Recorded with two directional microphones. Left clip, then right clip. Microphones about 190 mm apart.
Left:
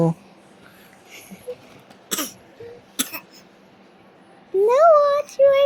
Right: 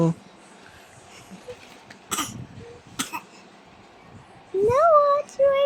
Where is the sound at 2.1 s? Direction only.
Centre (ahead or behind).